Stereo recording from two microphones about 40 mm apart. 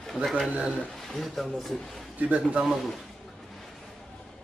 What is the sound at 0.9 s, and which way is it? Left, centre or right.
Speech, centre.